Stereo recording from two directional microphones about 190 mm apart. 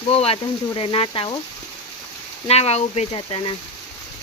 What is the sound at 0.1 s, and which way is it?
Speech, 30° left (ahead or behind).